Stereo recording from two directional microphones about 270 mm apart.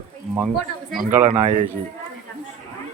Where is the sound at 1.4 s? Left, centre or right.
Right.